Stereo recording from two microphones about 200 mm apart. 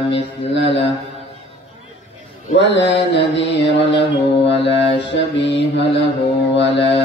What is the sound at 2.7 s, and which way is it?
Mantra, 60° left (ahead or behind).